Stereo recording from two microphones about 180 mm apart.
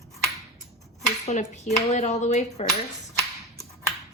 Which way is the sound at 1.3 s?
40° left (ahead or behind).